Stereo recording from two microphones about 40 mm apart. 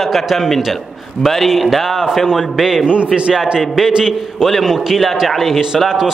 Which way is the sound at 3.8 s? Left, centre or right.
Centre.